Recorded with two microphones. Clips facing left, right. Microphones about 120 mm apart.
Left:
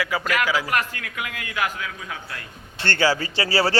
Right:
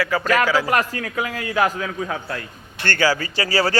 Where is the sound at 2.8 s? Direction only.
25° left (ahead or behind).